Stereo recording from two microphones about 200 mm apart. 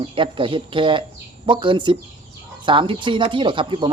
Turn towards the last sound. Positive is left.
turn(degrees=-25)  # may be behind; listen again after turning